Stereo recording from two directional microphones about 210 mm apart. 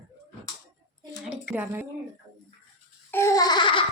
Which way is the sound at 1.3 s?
5° right (ahead or behind).